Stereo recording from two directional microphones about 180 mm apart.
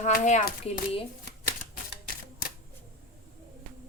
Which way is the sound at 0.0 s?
45° left (ahead or behind).